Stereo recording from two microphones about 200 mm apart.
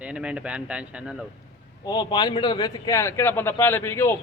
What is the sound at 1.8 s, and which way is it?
A man's voice, 20° left (ahead or behind).